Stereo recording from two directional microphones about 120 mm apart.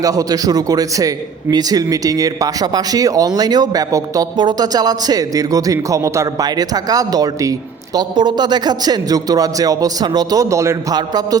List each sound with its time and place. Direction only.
0.0 s a man's voice: 30° right (ahead or behind)